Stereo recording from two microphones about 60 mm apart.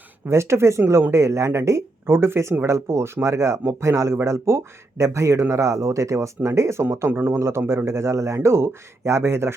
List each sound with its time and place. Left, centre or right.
0.3 s speech: right